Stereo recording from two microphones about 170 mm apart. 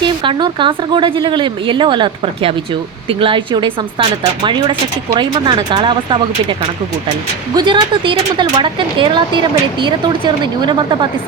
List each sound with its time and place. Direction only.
0.0 s speech: 25° right (ahead or behind)
7.5 s speech: 25° right (ahead or behind)